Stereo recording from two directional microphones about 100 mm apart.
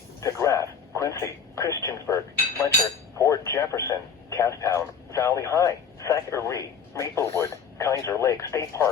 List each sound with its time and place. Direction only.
0.2 s a man's voice: 30° left (ahead or behind)